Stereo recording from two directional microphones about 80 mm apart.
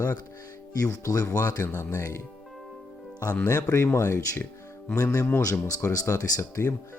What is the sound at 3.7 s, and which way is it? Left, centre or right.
Speech, left.